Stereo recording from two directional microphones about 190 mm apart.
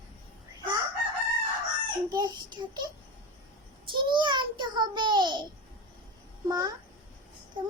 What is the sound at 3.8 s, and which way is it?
A child's voice, 25° right (ahead or behind).